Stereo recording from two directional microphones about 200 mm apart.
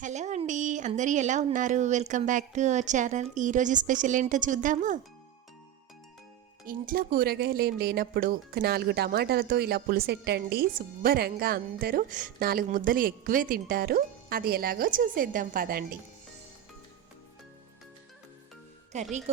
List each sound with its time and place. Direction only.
0.0 s speech: 35° right (ahead or behind)
6.7 s speech: 45° right (ahead or behind)
18.9 s speech: 35° right (ahead or behind)